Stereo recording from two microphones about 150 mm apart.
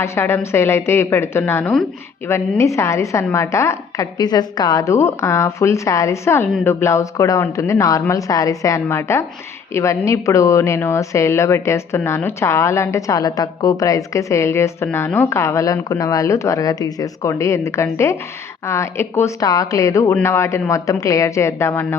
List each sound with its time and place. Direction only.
0.0 s a woman's voice: 15° left (ahead or behind)